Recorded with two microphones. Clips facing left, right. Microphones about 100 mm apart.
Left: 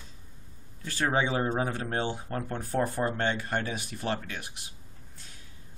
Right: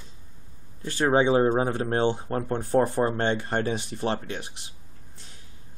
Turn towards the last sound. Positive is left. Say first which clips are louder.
# right 3 dB
turn(degrees=-25)  # may be behind; listen again after turning